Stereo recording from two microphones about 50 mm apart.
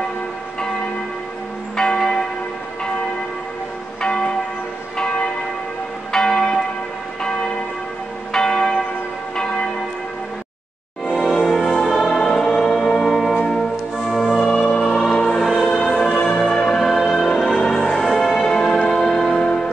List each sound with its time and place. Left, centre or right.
1.8 s church bell: centre
4.0 s church bell: centre
8.3 s church bell: centre
11.1 s music: centre
14.5 s music: centre
15.1 s choir: centre
15.6 s change ringing: centre
15.9 s change ringing: centre
16.3 s music: centre